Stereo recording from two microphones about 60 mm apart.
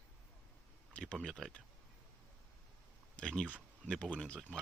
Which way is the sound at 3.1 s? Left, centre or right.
Centre.